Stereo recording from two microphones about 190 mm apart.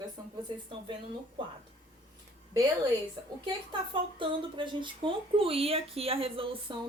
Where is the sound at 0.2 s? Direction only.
20° right (ahead or behind).